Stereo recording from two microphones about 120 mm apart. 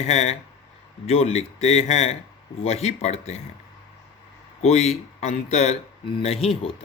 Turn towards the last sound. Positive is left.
turn(degrees=50)  # may be behind; listen again after turning